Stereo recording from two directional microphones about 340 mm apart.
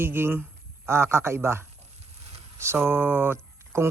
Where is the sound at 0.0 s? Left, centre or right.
Centre.